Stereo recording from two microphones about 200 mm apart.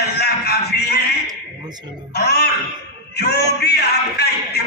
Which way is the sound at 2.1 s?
55° left (ahead or behind).